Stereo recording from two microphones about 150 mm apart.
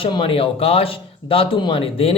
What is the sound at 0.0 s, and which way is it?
Speech, 35° left (ahead or behind).